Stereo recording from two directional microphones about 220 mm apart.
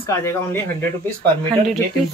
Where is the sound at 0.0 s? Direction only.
10° left (ahead or behind).